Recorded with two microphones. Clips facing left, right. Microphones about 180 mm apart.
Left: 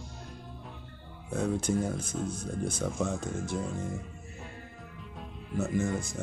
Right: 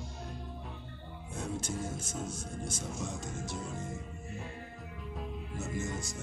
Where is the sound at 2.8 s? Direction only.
55° left (ahead or behind).